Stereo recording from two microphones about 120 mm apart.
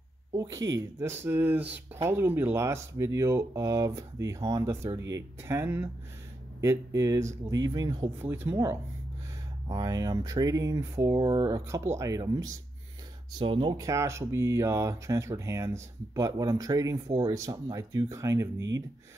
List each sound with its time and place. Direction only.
0.4 s speech: 30° right (ahead or behind)
8.2 s speech: 15° right (ahead or behind)
9.7 s speech: 30° right (ahead or behind)
13.4 s speech: 40° right (ahead or behind)
13.7 s speech: 25° right (ahead or behind)